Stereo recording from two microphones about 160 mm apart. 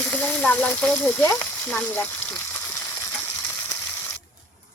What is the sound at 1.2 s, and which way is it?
Frying, 10° left (ahead or behind).